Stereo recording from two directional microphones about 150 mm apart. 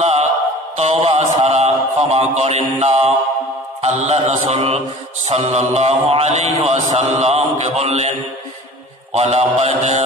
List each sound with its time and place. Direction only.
0.7 s mantra: 45° right (ahead or behind)
9.1 s mantra: 45° right (ahead or behind)